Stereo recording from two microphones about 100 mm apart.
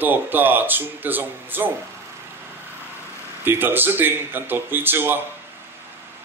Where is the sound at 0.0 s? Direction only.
20° right (ahead or behind).